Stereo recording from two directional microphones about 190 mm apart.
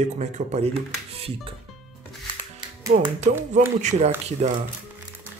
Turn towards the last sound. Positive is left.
turn(degrees=-35)  # may be behind; listen again after turning